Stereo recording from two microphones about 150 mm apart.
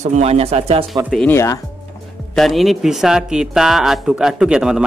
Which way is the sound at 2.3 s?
Centre (ahead or behind).